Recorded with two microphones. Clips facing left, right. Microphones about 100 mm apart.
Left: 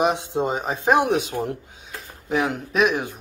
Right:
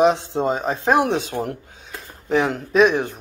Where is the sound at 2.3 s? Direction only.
5° left (ahead or behind).